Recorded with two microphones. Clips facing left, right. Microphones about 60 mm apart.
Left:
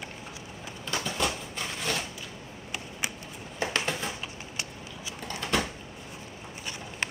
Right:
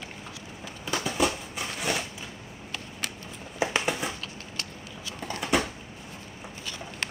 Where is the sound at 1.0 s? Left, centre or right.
Centre.